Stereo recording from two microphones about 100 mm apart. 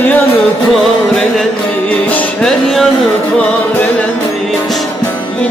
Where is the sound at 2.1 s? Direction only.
15° left (ahead or behind).